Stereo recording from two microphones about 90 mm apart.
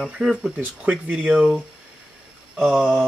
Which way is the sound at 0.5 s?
15° right (ahead or behind).